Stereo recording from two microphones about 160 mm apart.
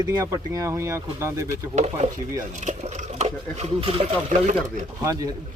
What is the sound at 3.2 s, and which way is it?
Speech, 40° right (ahead or behind).